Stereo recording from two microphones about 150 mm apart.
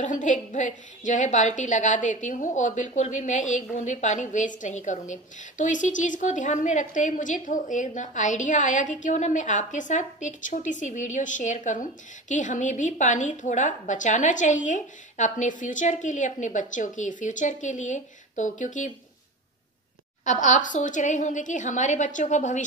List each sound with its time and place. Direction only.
0.0 s a woman's voice: 55° left (ahead or behind)
20.2 s a woman's voice: 55° left (ahead or behind)